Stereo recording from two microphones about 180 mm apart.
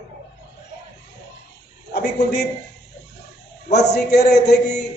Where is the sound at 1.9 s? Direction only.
65° left (ahead or behind).